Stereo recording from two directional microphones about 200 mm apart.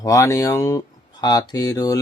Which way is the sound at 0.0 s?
15° left (ahead or behind).